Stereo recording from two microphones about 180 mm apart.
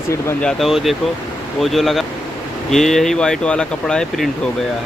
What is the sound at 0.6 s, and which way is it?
Speech, centre (ahead or behind).